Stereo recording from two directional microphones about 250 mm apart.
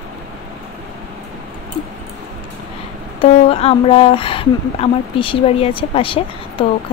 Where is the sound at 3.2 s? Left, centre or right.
Left.